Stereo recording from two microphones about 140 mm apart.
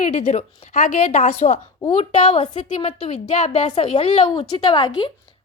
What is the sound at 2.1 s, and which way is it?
A woman's voice, 50° left (ahead or behind).